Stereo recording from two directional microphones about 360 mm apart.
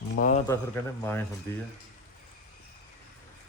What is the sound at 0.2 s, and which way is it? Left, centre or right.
Speech, left.